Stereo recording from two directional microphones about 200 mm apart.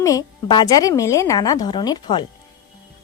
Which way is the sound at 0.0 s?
15° left (ahead or behind).